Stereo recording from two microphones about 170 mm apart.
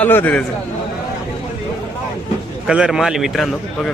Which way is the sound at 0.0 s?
10° left (ahead or behind).